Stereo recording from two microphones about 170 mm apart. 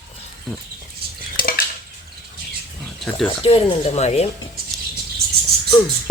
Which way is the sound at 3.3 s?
30° left (ahead or behind).